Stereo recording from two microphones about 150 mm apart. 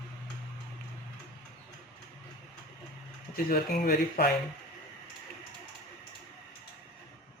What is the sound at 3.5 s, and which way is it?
Speech, 85° left.